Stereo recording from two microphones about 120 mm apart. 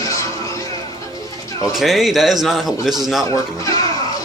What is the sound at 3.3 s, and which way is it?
Speech, 25° left (ahead or behind).